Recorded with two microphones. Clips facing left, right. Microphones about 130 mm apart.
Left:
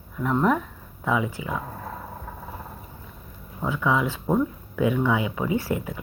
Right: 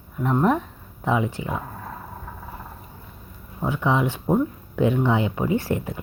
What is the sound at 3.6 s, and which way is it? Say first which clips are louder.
Speech: right 1 dB; 20° right (ahead or behind).